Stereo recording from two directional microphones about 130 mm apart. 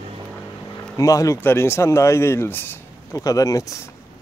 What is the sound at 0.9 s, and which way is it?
Speech, 25° left (ahead or behind).